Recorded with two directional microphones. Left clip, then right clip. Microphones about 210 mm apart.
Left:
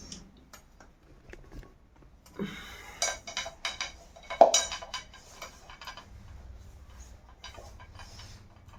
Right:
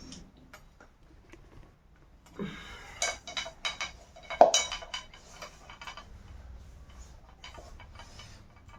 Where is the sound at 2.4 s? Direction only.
20° left (ahead or behind).